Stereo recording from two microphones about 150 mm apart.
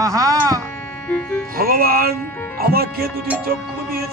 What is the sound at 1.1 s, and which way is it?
Music, 10° left (ahead or behind).